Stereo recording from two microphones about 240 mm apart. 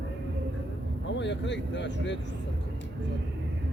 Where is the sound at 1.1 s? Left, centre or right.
Left.